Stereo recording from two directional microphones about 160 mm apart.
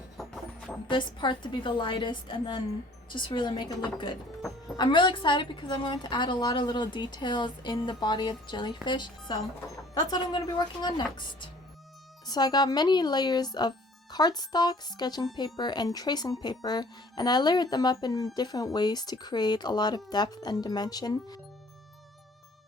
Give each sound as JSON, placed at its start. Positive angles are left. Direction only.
{"t": 0.2, "sound": "music", "side_deg": 0}
{"t": 0.9, "sound": "a woman's voice", "side_deg": 30}